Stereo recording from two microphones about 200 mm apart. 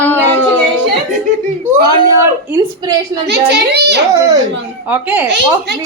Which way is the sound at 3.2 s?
55° right (ahead or behind).